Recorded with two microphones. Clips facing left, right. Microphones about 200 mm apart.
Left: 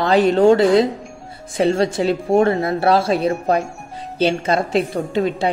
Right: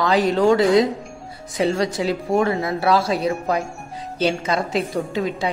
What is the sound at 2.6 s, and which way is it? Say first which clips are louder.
Speech: left 3 dB; 55° left (ahead or behind).